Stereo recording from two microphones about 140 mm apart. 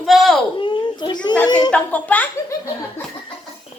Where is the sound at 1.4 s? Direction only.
30° left (ahead or behind).